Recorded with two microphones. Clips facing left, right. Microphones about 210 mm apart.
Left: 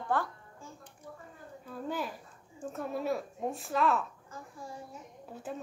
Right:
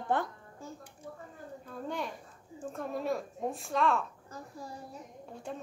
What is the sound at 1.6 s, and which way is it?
A child's voice, 5° left (ahead or behind).